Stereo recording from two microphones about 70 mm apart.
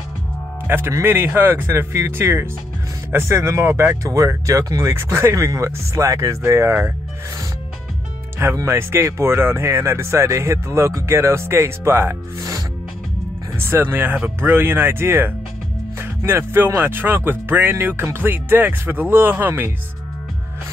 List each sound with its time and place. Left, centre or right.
0.7 s speech: right
4.9 s speech: right
8.6 s speech: right
13.6 s speech: right